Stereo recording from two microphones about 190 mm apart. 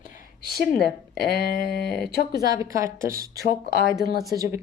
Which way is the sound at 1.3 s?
50° left (ahead or behind).